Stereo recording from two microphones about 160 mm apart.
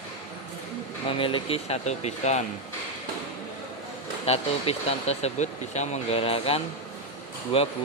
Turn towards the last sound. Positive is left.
turn(degrees=35)  # may be behind; listen again after turning